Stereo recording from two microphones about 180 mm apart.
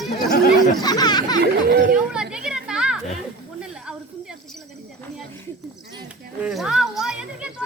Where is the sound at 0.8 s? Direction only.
20° left (ahead or behind).